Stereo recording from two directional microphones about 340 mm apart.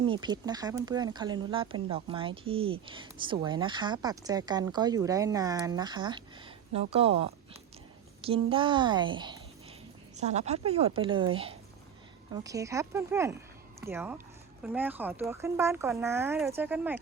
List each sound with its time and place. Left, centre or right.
0.0 s speech: centre